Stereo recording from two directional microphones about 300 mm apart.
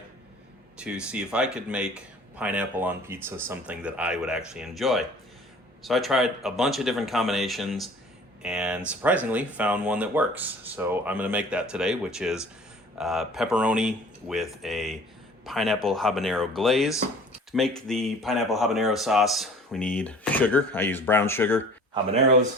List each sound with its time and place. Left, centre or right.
0.8 s speech: centre
21.9 s speech: right